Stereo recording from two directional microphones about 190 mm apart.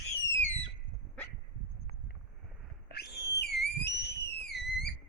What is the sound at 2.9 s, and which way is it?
Whistle, 60° left (ahead or behind).